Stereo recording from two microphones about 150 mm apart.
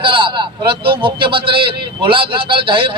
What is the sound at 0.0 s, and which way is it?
A man's voice, 35° right (ahead or behind).